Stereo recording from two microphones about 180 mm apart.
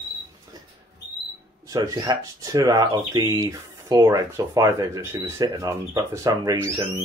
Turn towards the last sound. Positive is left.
turn(degrees=-20)  # may be behind; listen again after turning